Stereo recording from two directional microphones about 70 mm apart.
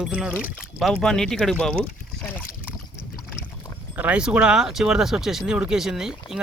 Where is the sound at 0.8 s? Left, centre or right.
Centre.